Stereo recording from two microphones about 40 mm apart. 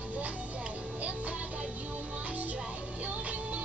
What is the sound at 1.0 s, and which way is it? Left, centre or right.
Music, right.